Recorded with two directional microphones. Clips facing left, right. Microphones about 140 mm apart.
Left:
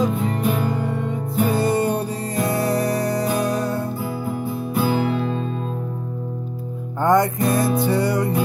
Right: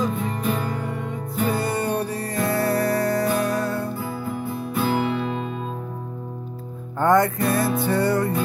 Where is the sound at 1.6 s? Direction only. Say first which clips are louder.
Left 4 dB; 25° left (ahead or behind).